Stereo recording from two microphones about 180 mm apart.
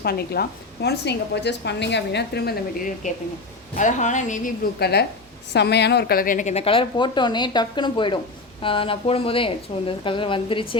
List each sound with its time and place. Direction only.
0.0 s a woman's voice: 60° left (ahead or behind)
3.8 s speech: 45° left (ahead or behind)
4.8 s a woman's voice: 65° left (ahead or behind); by 10.8 s 30° left (ahead or behind)